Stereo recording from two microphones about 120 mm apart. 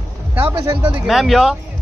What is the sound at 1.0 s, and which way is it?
Speech, centre (ahead or behind).